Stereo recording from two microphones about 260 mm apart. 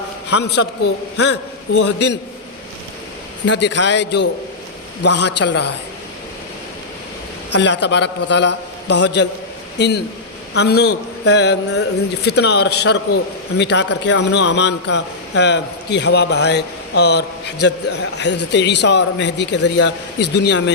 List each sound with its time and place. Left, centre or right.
0.3 s a man's voice: left
3.4 s a man's voice: left
7.6 s a man's voice: left